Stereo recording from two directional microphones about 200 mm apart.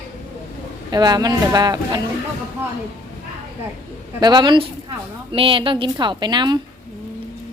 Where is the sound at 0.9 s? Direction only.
20° right (ahead or behind).